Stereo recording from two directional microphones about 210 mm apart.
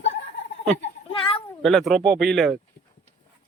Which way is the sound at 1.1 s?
25° left (ahead or behind).